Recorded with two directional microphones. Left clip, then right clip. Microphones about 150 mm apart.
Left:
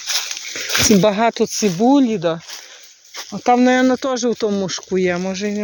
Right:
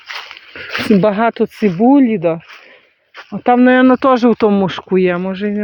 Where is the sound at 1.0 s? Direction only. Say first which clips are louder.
Right 2 dB; 20° right (ahead or behind).